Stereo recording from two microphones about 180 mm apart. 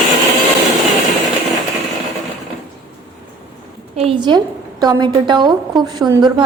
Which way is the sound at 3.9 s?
30° right (ahead or behind).